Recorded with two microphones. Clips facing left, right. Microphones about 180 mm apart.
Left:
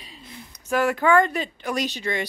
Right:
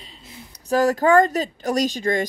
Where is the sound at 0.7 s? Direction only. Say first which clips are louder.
Right 3 dB; 40° right (ahead or behind).